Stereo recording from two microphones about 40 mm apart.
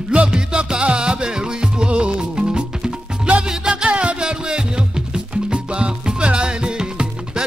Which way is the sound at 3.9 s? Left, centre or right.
Right.